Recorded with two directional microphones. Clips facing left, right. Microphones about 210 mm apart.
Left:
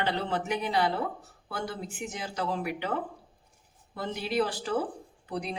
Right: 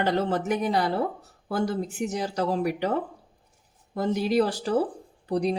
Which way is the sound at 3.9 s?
40° right (ahead or behind).